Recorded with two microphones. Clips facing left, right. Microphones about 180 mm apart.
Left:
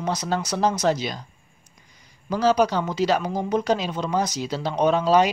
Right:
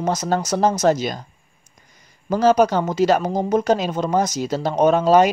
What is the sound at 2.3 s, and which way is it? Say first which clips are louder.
Speech: right 4 dB; 50° right (ahead or behind).